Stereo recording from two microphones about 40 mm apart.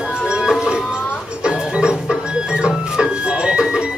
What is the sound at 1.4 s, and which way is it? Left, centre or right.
Music, right.